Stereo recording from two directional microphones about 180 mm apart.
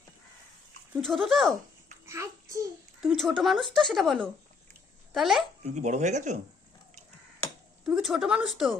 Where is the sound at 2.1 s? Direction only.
15° right (ahead or behind).